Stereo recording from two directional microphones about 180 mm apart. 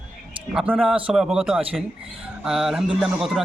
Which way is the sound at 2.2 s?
5° right (ahead or behind).